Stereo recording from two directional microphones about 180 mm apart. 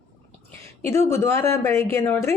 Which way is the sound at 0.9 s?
15° left (ahead or behind).